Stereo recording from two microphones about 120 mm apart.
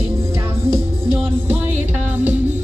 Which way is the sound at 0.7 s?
20° right (ahead or behind).